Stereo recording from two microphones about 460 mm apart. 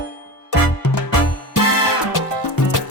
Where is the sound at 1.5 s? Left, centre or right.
Left.